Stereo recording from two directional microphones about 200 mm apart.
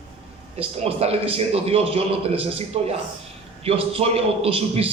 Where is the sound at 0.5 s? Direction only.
30° right (ahead or behind).